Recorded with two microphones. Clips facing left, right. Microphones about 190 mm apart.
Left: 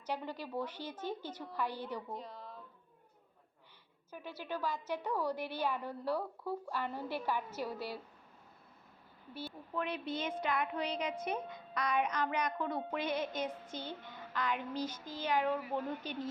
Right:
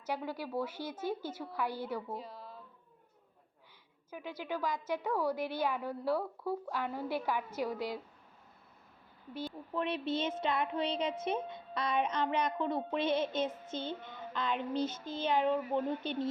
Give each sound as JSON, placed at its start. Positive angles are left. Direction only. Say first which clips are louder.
{"t": 0.0, "sound": "a woman's voice", "louder": "right 2 dB", "side_deg": -10}
{"t": 4.1, "sound": "a woman's voice", "louder": "right 3 dB", "side_deg": -10}
{"t": 9.3, "sound": "a woman's voice", "louder": "right 3 dB", "side_deg": -15}
{"t": 9.8, "sound": "a woman's voice", "louder": "right 5 dB", "side_deg": -25}